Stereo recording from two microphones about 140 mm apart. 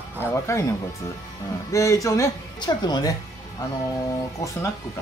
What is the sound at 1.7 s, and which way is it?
Speech, 20° left (ahead or behind).